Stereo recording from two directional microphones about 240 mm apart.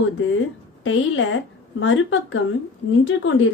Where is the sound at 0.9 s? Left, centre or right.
Left.